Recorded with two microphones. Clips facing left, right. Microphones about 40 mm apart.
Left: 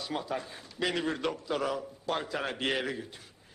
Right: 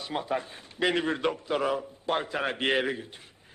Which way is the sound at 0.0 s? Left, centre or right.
Right.